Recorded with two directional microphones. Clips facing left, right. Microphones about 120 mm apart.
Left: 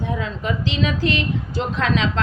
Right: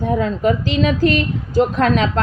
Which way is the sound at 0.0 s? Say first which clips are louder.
Right 8 dB; 45° right (ahead or behind).